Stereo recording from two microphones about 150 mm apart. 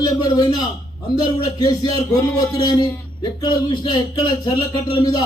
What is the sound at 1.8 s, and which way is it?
A man's voice, 30° left (ahead or behind).